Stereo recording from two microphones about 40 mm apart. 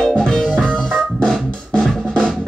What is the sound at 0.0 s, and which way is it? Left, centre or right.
Music, centre.